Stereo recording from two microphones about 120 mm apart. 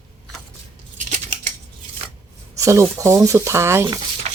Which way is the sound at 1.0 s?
90° right.